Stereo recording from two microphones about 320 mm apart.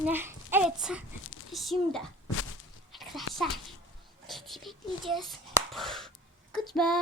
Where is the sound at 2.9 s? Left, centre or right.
Centre.